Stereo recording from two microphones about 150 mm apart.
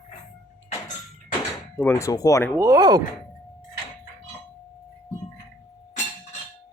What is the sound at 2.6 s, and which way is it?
Speech, 25° right (ahead or behind).